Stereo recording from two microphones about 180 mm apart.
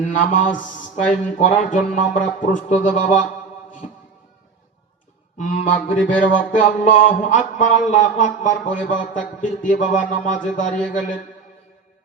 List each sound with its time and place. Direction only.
0.0 s mantra: 45° left (ahead or behind)
5.4 s mantra: 45° left (ahead or behind)